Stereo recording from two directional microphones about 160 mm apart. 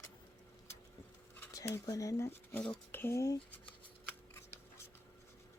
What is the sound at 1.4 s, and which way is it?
Speech, 20° left (ahead or behind).